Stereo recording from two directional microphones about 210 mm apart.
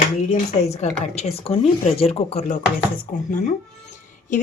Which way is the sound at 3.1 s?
40° left (ahead or behind).